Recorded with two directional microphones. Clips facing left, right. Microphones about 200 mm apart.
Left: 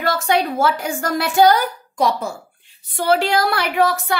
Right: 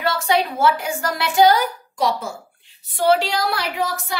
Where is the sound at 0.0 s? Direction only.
50° left (ahead or behind).